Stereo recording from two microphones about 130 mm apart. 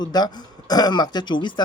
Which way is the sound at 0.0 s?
30° left (ahead or behind).